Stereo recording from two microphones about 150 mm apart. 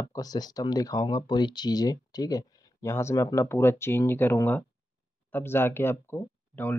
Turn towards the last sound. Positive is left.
turn(degrees=15)  # may be behind; listen again after turning